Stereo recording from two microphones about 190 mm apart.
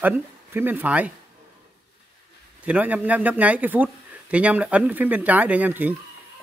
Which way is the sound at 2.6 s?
5° right (ahead or behind).